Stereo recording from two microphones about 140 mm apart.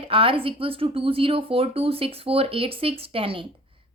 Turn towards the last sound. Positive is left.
turn(degrees=-40)  # may be behind; listen again after turning